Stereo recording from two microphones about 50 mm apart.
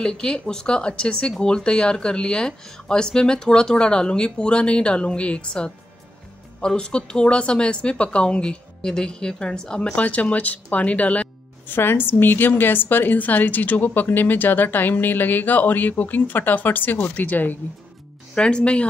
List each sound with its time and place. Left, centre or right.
0.0 s speech: centre
9.9 s speech: left
11.6 s a woman's voice: left
18.3 s speech: left